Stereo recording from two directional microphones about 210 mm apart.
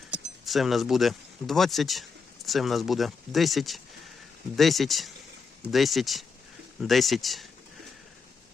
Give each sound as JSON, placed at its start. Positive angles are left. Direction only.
{"t": 0.1, "sound": "speech", "side_deg": 0}